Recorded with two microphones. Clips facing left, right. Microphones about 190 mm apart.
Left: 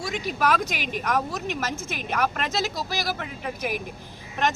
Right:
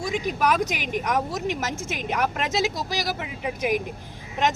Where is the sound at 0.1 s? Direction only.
15° right (ahead or behind).